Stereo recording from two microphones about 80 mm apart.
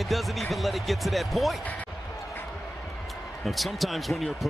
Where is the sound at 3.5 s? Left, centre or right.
Centre.